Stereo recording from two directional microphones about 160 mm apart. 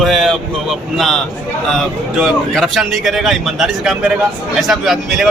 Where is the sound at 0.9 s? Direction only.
Centre (ahead or behind).